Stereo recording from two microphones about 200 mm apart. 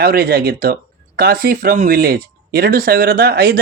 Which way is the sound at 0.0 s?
50° right (ahead or behind).